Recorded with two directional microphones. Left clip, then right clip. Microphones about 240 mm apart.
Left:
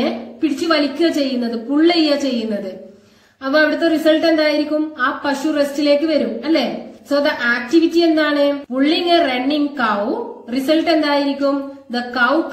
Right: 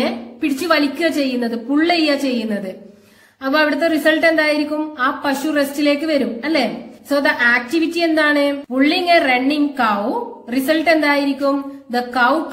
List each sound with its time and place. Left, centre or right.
0.0 s a woman's voice: right
3.4 s a woman's voice: right